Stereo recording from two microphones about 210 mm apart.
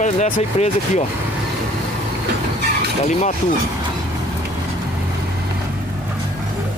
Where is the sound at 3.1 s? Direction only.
35° left (ahead or behind).